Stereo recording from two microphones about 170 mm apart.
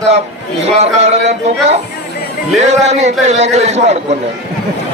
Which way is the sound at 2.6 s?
40° right (ahead or behind).